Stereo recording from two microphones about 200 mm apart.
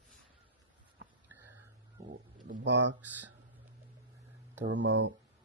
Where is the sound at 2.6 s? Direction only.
60° right (ahead or behind).